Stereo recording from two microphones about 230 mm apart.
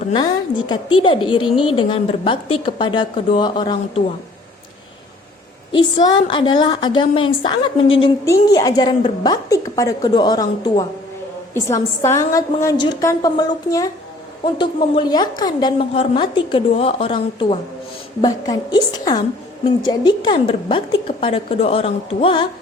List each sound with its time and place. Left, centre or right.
0.1 s a woman's voice: centre
5.7 s a woman's voice: centre